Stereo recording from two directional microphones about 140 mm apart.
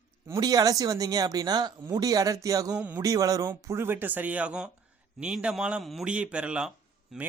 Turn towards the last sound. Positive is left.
turn(degrees=0)  # may be behind; listen again after turning